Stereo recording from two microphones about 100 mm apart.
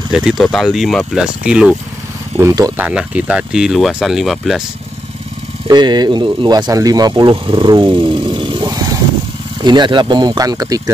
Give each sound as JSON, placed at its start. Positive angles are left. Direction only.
{"t": 0.1, "sound": "speech", "side_deg": -5}
{"t": 2.8, "sound": "speech", "side_deg": -10}
{"t": 5.7, "sound": "speech", "side_deg": -45}
{"t": 6.7, "sound": "speech", "side_deg": -40}
{"t": 7.4, "sound": "speech", "side_deg": -55}
{"t": 8.6, "sound": "vehicle", "side_deg": -35}
{"t": 9.6, "sound": "speech", "side_deg": -50}